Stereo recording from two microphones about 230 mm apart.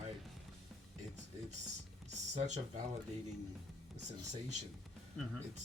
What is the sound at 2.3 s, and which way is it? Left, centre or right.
Speech, right.